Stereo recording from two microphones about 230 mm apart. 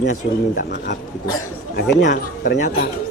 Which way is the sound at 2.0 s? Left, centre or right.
Left.